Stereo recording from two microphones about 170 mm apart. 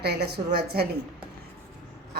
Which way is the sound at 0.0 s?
75° right (ahead or behind).